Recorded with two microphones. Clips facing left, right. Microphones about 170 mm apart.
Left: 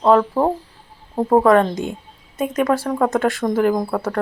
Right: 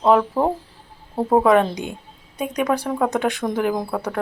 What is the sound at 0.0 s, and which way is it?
A woman's voice, 10° right (ahead or behind).